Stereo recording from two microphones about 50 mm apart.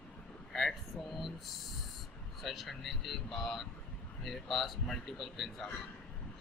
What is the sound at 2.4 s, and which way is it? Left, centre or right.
A man's voice, centre.